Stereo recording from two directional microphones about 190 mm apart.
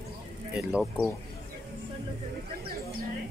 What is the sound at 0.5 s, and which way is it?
Speech, centre (ahead or behind).